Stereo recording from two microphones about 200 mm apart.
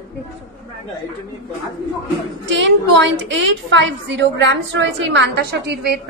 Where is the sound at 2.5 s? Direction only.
65° right (ahead or behind).